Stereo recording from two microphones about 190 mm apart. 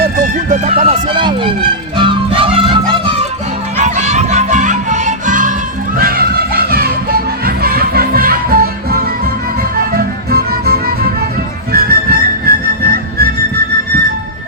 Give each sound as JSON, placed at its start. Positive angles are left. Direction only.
{"t": 0.0, "sound": "music", "side_deg": -45}
{"t": 0.9, "sound": "speech", "side_deg": -25}
{"t": 2.0, "sound": "music", "side_deg": -25}
{"t": 3.8, "sound": "music", "side_deg": -40}
{"t": 6.0, "sound": "music", "side_deg": -50}